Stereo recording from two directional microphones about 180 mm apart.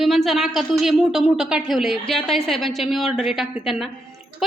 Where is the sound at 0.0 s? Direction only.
Centre (ahead or behind).